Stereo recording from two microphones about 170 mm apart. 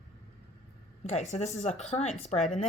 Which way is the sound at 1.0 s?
40° left (ahead or behind).